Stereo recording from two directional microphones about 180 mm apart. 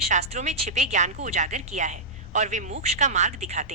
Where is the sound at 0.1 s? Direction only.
40° right (ahead or behind).